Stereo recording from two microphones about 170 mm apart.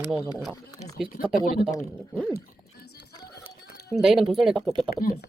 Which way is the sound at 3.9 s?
Centre (ahead or behind).